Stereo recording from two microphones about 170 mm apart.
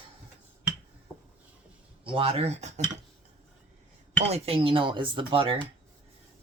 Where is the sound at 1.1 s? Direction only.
10° left (ahead or behind).